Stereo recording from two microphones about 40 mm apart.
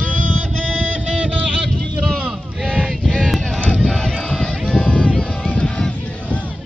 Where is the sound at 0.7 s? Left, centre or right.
Right.